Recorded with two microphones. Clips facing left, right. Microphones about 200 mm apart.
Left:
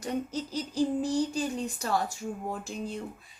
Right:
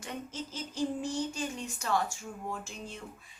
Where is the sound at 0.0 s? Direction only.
40° left (ahead or behind).